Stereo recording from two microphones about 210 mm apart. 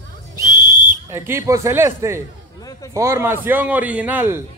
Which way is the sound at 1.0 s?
10° right (ahead or behind).